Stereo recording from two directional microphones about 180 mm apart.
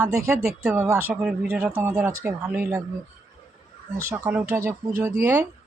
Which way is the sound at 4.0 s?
15° right (ahead or behind).